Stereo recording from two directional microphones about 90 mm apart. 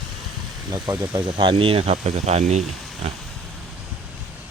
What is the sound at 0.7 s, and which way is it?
Speech, 50° right (ahead or behind).